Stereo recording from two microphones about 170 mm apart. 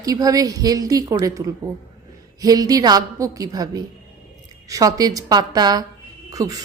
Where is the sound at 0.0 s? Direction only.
20° right (ahead or behind).